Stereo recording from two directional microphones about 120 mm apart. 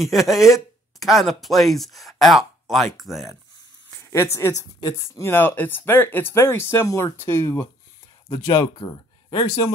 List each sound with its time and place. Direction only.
0.0 s speech: centre (ahead or behind)
4.1 s speech: 20° left (ahead or behind)
8.8 s speech: 35° left (ahead or behind)